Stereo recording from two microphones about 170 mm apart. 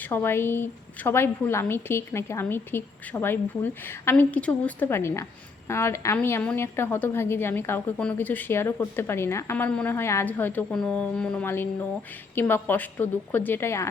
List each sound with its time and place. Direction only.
0.1 s a woman's voice: 15° left (ahead or behind)